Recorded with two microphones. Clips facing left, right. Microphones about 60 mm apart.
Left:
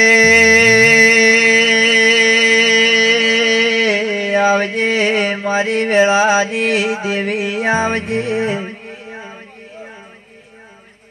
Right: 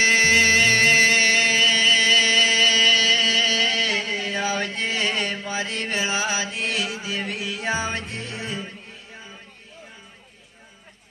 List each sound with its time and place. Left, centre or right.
0.0 s music: left